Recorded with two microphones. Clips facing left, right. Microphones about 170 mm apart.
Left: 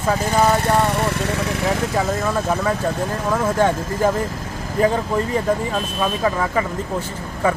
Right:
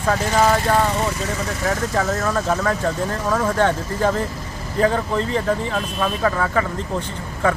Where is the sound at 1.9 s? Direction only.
10° left (ahead or behind).